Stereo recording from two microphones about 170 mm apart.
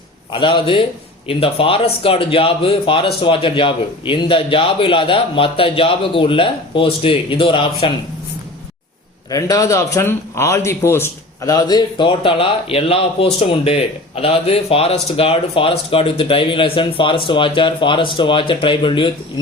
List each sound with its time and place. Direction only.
0.3 s a man's voice: 30° left (ahead or behind)
9.3 s a man's voice: 20° left (ahead or behind)